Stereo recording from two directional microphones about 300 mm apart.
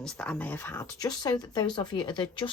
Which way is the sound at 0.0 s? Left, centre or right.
Centre.